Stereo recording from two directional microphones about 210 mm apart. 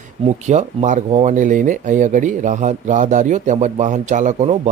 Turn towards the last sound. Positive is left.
turn(degrees=-35)  # may be behind; listen again after turning